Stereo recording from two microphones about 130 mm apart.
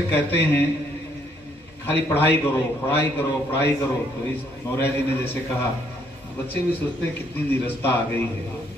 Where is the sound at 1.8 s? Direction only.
15° left (ahead or behind).